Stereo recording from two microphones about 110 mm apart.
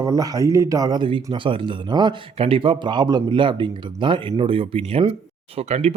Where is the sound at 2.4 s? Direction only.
55° right (ahead or behind).